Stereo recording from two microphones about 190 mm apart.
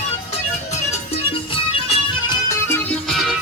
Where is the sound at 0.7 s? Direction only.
35° left (ahead or behind).